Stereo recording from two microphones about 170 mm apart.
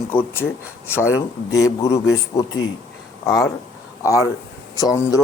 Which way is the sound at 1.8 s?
40° left (ahead or behind).